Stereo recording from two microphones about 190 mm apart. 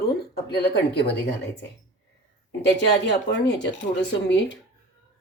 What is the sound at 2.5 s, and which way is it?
Speech, 65° left (ahead or behind).